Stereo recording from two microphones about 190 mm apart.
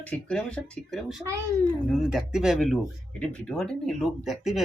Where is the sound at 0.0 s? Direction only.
5° left (ahead or behind).